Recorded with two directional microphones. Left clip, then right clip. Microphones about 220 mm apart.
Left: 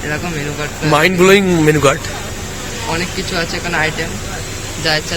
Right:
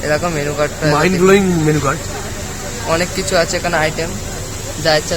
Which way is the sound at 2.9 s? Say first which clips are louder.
Right 6 dB; 50° right (ahead or behind).